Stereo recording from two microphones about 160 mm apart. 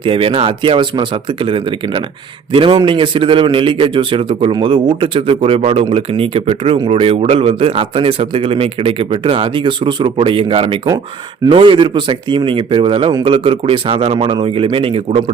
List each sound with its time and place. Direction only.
0.0 s a man's voice: 35° right (ahead or behind)